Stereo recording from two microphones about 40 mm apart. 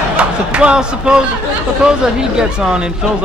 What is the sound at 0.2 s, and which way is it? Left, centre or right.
Speech, right.